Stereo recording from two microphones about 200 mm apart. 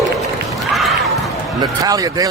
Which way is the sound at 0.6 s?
Centre (ahead or behind).